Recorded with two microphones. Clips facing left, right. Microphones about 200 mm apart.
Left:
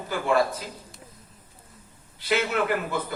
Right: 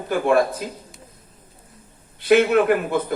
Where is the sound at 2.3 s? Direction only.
55° right (ahead or behind).